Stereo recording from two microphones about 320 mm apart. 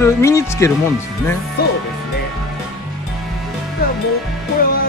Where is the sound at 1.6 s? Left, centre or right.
Left.